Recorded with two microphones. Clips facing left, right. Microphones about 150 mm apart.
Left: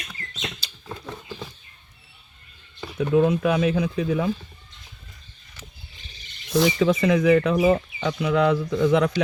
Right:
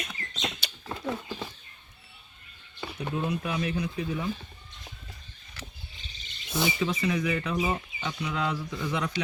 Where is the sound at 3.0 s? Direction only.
90° left.